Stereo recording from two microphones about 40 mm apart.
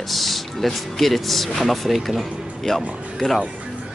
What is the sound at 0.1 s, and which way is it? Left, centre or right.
Speech, centre.